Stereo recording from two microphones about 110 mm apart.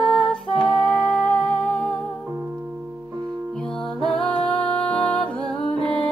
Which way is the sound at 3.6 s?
5° left (ahead or behind).